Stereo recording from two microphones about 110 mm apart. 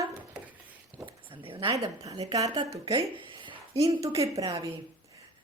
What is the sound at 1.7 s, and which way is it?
Speech, 30° right (ahead or behind).